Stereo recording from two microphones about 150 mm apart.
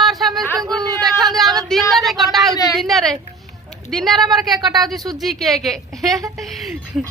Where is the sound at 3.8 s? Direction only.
Centre (ahead or behind).